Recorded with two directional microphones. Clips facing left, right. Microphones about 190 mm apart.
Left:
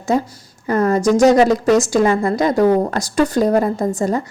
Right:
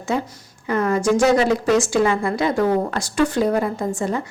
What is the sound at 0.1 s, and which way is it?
A woman's voice, 40° left (ahead or behind).